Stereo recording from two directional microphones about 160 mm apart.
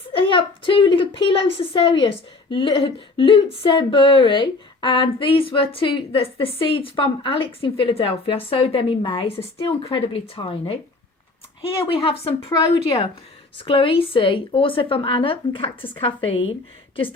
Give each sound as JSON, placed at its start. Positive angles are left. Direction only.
{"t": 0.2, "sound": "a woman's voice", "side_deg": 30}
{"t": 11.9, "sound": "a woman's voice", "side_deg": 35}
{"t": 13.6, "sound": "a woman's voice", "side_deg": 35}